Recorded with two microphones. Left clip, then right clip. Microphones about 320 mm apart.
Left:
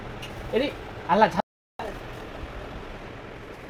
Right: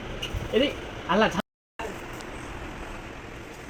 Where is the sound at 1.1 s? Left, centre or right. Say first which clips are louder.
Left 3 dB; centre.